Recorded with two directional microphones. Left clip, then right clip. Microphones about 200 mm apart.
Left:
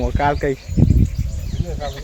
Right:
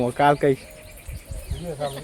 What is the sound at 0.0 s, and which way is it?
Speech, 10° right (ahead or behind).